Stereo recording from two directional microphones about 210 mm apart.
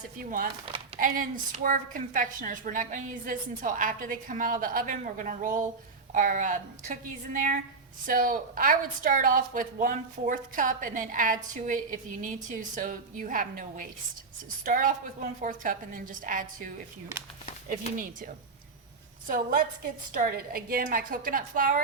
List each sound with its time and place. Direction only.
0.2 s a woman's voice: 45° right (ahead or behind)
17.9 s a woman's voice: 40° right (ahead or behind)
19.3 s a woman's voice: 40° right (ahead or behind)